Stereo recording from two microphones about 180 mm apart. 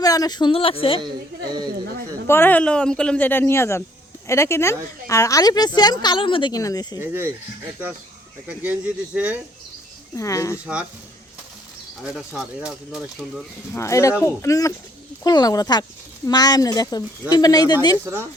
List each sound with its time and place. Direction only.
0.0 s a woman's voice: 20° left (ahead or behind)
2.2 s a woman's voice: 10° left (ahead or behind)
7.0 s speech: 15° right (ahead or behind)
8.4 s speech: 10° right (ahead or behind)
10.2 s speech: 15° left (ahead or behind)
12.0 s speech: 5° right (ahead or behind)
13.7 s a woman's voice: 15° left (ahead or behind)
18.0 s speech: 15° right (ahead or behind)